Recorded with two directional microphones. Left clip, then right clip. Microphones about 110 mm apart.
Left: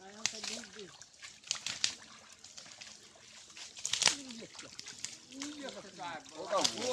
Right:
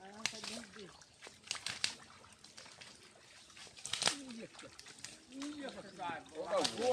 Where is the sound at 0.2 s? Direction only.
20° right (ahead or behind).